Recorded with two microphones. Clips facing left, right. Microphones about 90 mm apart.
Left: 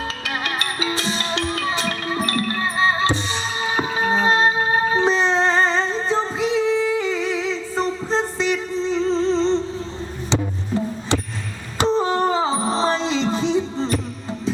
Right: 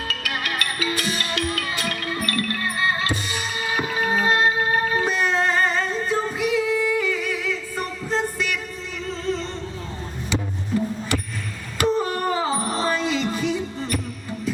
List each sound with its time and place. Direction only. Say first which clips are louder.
0.1 s music: left 2 dB; 25° left (ahead or behind)
11.1 s a sound: left 6 dB; 25° left (ahead or behind)
11.8 s music: left 3 dB; 25° left (ahead or behind)